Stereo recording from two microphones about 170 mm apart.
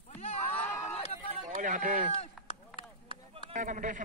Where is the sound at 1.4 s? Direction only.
50° right (ahead or behind).